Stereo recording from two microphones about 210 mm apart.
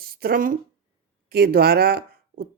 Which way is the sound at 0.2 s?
45° right (ahead or behind).